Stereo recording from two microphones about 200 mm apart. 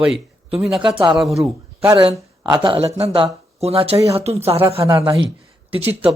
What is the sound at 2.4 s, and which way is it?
Speech, 25° right (ahead or behind).